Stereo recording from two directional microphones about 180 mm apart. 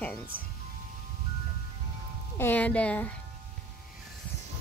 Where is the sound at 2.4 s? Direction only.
10° left (ahead or behind).